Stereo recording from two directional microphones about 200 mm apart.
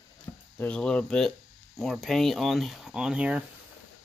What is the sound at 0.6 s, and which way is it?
Speech, 5° left (ahead or behind).